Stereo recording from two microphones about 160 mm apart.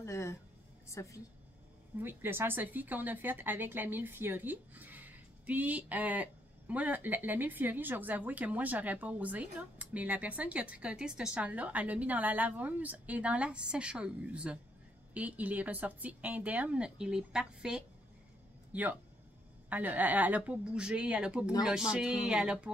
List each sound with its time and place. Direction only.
0.0 s a sound: 15° left (ahead or behind)
0.8 s a woman's voice: 20° left (ahead or behind)
2.0 s speech: 15° right (ahead or behind)